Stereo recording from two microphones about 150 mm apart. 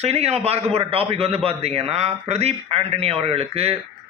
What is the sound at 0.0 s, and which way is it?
A man's voice, 45° right (ahead or behind).